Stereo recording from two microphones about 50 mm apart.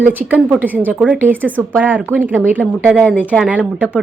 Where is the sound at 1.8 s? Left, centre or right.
Right.